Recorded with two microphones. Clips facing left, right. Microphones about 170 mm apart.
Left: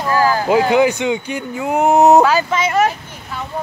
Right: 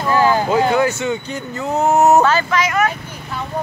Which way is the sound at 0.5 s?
15° left (ahead or behind).